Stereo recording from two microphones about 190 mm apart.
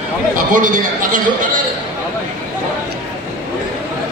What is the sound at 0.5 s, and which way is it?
Speech, 45° right (ahead or behind).